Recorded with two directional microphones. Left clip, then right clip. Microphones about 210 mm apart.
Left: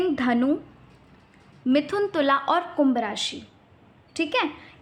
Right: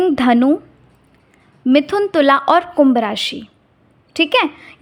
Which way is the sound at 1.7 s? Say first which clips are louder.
Right 9 dB; 40° right (ahead or behind).